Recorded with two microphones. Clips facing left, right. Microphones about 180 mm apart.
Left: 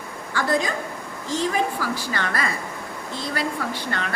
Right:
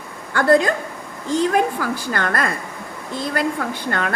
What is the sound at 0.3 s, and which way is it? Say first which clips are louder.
A man's voice: right 7 dB; 60° right (ahead or behind).